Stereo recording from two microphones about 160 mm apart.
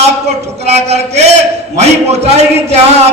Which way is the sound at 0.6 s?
40° right (ahead or behind).